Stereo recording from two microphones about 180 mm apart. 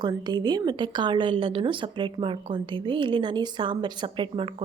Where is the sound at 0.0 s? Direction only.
25° right (ahead or behind).